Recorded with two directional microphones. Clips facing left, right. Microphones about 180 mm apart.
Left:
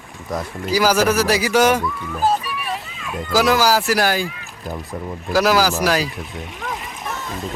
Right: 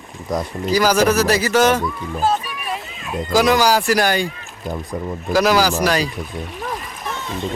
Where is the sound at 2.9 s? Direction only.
30° right (ahead or behind).